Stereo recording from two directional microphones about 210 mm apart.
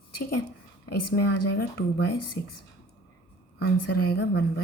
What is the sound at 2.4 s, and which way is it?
Speech, 45° left (ahead or behind).